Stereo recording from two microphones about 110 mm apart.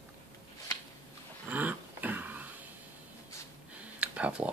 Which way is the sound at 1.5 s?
15° right (ahead or behind).